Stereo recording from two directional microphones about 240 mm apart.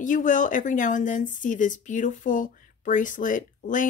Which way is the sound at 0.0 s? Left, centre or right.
Left.